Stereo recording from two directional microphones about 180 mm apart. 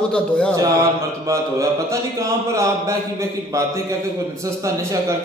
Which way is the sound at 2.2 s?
15° right (ahead or behind).